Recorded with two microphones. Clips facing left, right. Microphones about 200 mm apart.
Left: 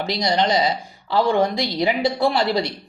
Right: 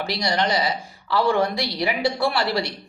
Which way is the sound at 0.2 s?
25° left (ahead or behind).